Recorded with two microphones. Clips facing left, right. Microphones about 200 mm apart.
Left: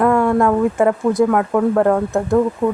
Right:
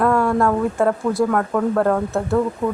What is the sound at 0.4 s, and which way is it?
Speech, 5° left (ahead or behind).